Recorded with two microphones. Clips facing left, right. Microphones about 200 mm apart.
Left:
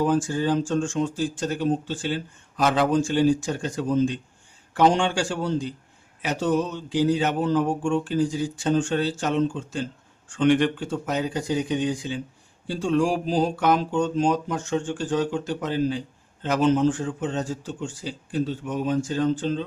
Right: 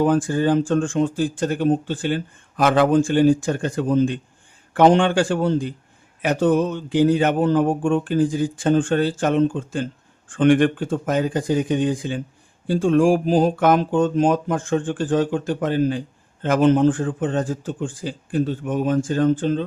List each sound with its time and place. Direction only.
0.0 s speech: 55° right (ahead or behind)